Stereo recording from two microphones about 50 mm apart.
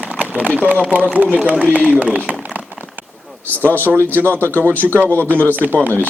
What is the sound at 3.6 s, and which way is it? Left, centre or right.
Speech, left.